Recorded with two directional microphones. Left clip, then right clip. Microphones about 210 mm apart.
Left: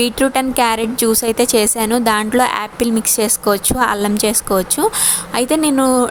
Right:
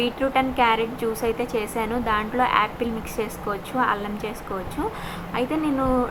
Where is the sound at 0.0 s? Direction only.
65° left (ahead or behind).